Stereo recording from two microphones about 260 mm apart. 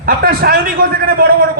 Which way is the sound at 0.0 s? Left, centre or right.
Right.